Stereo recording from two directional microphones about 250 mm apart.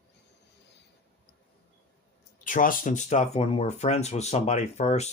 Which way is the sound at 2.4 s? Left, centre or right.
Left.